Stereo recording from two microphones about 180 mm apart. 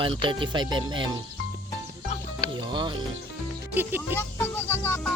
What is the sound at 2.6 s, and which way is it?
Speech, 25° right (ahead or behind).